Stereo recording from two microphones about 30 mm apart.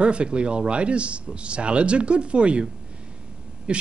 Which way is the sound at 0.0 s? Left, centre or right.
Right.